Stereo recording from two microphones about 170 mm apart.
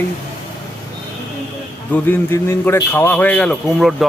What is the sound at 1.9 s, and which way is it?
A man's voice, 10° left (ahead or behind).